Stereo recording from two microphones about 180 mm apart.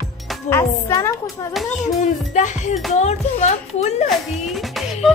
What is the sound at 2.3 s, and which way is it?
A child's voice, 40° left (ahead or behind).